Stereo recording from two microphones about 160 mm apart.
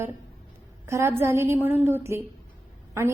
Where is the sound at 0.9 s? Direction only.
15° right (ahead or behind).